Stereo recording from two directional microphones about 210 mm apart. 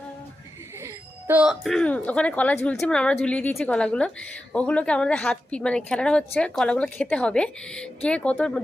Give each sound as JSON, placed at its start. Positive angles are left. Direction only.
{"t": 1.3, "sound": "speech", "side_deg": -5}